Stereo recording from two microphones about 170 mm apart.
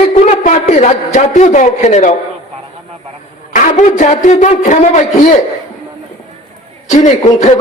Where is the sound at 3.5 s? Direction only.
45° left (ahead or behind).